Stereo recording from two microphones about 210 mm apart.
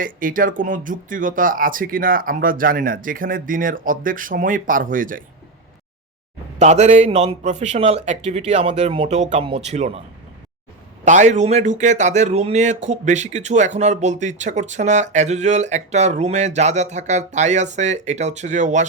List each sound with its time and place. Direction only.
0.0 s speech: 40° right (ahead or behind)
6.6 s speech: 30° right (ahead or behind)
11.0 s speech: 35° right (ahead or behind)